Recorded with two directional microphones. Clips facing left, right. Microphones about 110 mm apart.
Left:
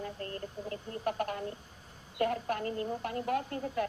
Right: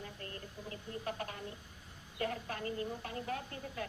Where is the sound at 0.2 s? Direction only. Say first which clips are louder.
Left 7 dB; 35° left (ahead or behind).